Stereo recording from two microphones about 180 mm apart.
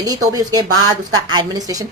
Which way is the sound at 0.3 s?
20° right (ahead or behind).